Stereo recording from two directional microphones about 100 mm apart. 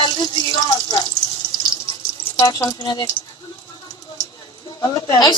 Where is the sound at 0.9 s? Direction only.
55° left (ahead or behind).